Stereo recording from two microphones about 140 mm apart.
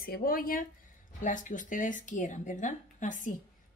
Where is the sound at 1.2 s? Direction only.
65° left (ahead or behind).